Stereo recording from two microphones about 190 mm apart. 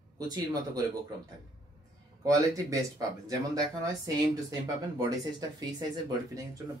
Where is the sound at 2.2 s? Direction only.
20° right (ahead or behind).